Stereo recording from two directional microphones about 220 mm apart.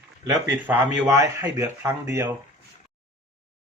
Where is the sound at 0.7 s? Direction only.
10° right (ahead or behind).